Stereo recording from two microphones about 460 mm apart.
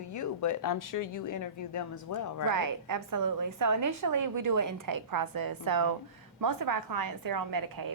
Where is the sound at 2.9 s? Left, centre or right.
Right.